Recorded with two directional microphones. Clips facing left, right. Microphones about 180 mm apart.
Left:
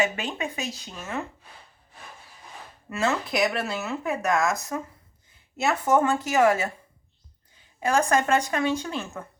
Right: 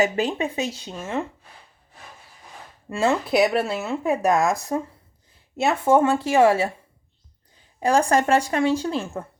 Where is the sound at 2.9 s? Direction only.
30° right (ahead or behind).